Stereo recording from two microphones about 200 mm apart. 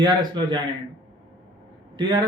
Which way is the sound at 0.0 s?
20° right (ahead or behind).